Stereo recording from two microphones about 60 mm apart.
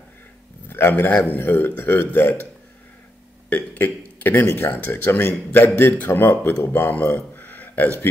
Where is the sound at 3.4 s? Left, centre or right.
Left.